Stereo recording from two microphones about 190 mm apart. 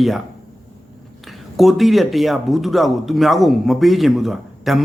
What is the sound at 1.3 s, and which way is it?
Speech, centre (ahead or behind).